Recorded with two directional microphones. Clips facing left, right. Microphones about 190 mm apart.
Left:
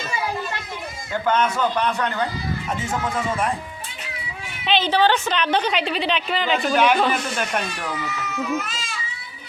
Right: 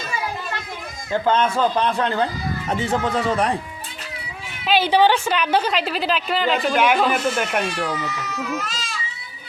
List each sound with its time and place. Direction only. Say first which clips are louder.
1.2 s a man's voice: right 1 dB; 30° right (ahead or behind)
4.6 s a woman's voice: right 2 dB; 10° right (ahead or behind)